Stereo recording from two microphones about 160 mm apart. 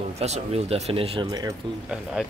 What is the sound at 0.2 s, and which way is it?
Speech, 40° right (ahead or behind).